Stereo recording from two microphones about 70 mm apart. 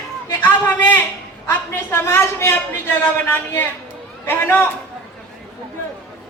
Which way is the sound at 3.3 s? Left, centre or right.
Left.